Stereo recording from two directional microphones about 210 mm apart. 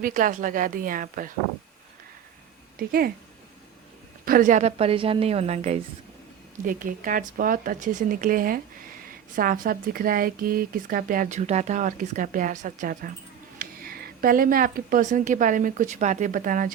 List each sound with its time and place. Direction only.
0.0 s speech: 40° right (ahead or behind)
2.7 s speech: 45° right (ahead or behind)
4.3 s a woman's voice: 40° right (ahead or behind)